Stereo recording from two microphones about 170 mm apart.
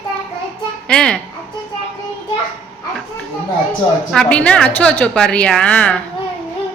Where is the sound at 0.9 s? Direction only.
5° left (ahead or behind).